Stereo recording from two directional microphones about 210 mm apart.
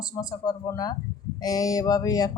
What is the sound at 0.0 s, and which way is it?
Speech, 20° left (ahead or behind).